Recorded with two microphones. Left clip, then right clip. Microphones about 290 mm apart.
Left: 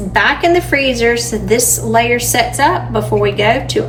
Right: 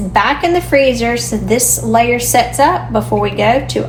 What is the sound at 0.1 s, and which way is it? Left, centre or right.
A woman's voice, centre.